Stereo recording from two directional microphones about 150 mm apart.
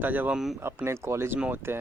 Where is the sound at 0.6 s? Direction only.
15° right (ahead or behind).